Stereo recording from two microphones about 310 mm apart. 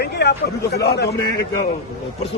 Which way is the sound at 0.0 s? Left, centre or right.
Left.